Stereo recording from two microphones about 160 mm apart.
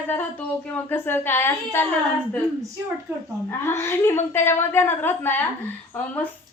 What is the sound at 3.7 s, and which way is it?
A woman's voice, 15° left (ahead or behind).